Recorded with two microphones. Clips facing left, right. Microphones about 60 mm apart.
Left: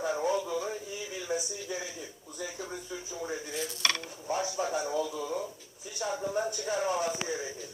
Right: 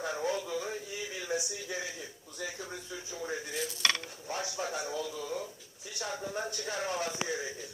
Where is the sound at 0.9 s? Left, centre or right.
Right.